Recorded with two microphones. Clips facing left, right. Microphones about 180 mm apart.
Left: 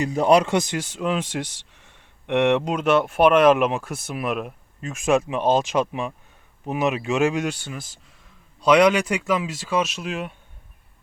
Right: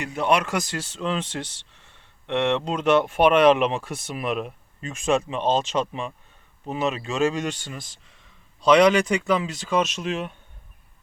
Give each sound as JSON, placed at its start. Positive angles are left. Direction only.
{"t": 0.0, "sound": "speech", "side_deg": 35}
{"t": 0.5, "sound": "speech", "side_deg": 20}